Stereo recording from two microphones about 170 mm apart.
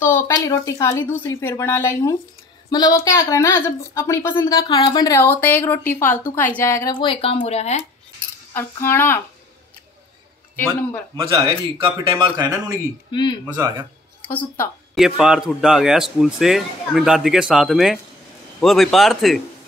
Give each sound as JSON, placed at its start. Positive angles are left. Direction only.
{"t": 0.0, "sound": "a woman's voice", "side_deg": 15}
{"t": 8.5, "sound": "a woman's voice", "side_deg": 15}
{"t": 10.5, "sound": "speech", "side_deg": 10}
{"t": 11.3, "sound": "speech", "side_deg": -35}
{"t": 13.1, "sound": "a woman's voice", "side_deg": 25}
{"t": 14.2, "sound": "a woman's voice", "side_deg": 10}
{"t": 15.0, "sound": "speech", "side_deg": 0}